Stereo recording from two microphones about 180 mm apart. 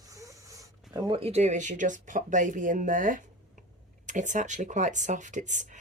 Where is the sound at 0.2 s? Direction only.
20° right (ahead or behind).